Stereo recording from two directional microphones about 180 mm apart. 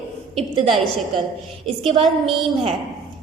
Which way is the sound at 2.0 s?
Centre (ahead or behind).